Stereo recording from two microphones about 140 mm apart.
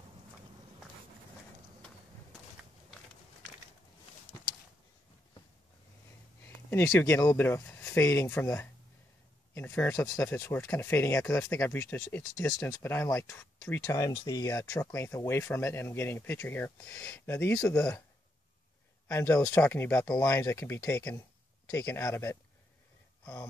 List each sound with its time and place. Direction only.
6.4 s speech: 15° left (ahead or behind)
9.5 s a sound: 15° left (ahead or behind)
10.1 s speech: 15° left (ahead or behind)
13.6 s a sound: 10° left (ahead or behind)
13.8 s speech: 30° left (ahead or behind)
19.0 s speech: 15° left (ahead or behind)